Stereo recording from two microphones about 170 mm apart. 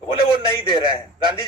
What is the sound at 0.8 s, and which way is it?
Speech, 25° right (ahead or behind).